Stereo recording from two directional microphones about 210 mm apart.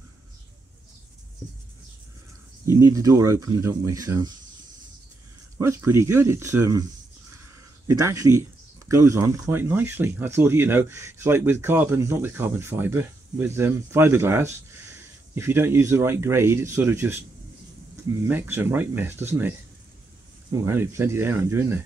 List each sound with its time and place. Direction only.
2.6 s speech: 15° right (ahead or behind)
5.6 s speech: 10° right (ahead or behind)
7.9 s speech: 15° right (ahead or behind)
18.2 s speech: 10° right (ahead or behind)
20.5 s speech: 10° right (ahead or behind)